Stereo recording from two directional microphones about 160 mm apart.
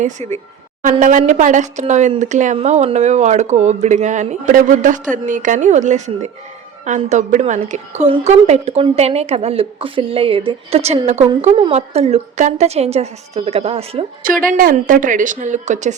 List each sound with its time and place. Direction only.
0.0 s a woman's voice: 50° right (ahead or behind)
14.3 s speech: 60° right (ahead or behind)